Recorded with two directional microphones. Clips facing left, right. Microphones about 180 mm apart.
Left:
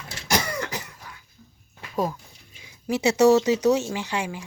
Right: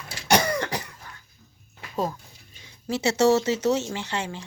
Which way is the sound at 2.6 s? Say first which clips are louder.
Left 3 dB; 15° left (ahead or behind).